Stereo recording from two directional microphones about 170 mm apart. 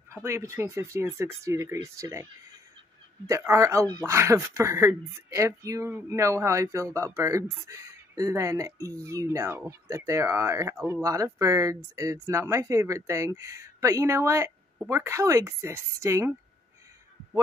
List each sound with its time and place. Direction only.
0.1 s speech: 15° right (ahead or behind)
3.3 s speech: 20° right (ahead or behind)